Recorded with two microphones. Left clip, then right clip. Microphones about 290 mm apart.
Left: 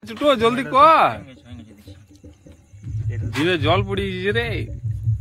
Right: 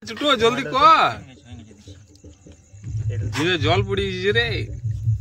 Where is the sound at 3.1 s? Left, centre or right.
Centre.